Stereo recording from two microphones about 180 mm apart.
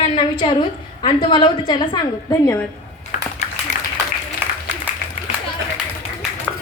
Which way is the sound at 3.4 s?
40° left (ahead or behind).